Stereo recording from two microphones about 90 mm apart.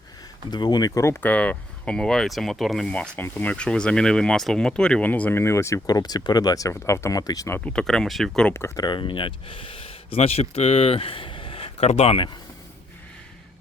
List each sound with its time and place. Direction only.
0.5 s speech: 50° left (ahead or behind)
1.1 s speech: 15° left (ahead or behind)
2.9 s speech: 15° left (ahead or behind)
3.5 s speech: 10° left (ahead or behind)
5.4 s speech: 30° left (ahead or behind)
5.8 s speech: 45° left (ahead or behind)
7.6 s speech: 10° left (ahead or behind)
8.5 s speech: 30° left (ahead or behind)
8.8 s speech: 60° left (ahead or behind); by 12.3 s 85° left